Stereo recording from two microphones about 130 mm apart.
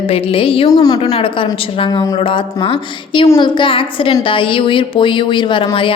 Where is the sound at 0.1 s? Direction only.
45° left (ahead or behind).